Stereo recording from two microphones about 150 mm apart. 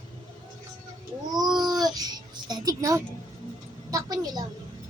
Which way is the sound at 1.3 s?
25° right (ahead or behind).